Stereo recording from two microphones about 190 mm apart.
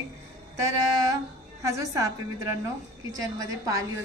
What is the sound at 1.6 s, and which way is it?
A woman's voice, 15° right (ahead or behind).